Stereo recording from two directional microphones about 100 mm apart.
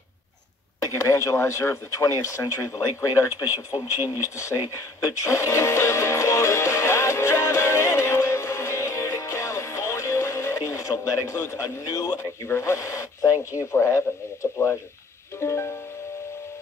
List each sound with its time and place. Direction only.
0.9 s speech: 30° left (ahead or behind)
5.0 s music: 30° left (ahead or behind)